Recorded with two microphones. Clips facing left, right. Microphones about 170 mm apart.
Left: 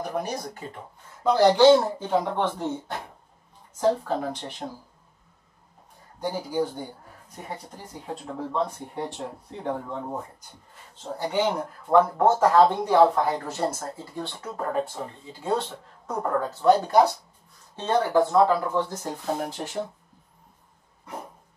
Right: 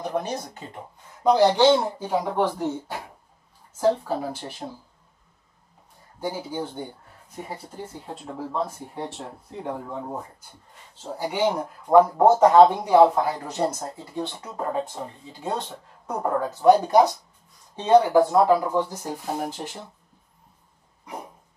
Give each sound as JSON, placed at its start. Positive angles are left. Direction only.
{"t": 0.2, "sound": "speech", "side_deg": -20}
{"t": 6.1, "sound": "speech", "side_deg": -5}
{"t": 6.5, "sound": "speech", "side_deg": 10}
{"t": 7.3, "sound": "speech", "side_deg": -5}
{"t": 11.1, "sound": "speech", "side_deg": -10}